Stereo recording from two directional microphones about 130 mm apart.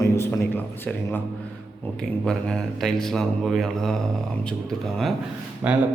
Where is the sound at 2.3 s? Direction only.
5° left (ahead or behind).